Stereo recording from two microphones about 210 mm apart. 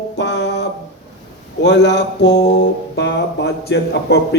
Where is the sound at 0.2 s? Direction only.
55° left (ahead or behind).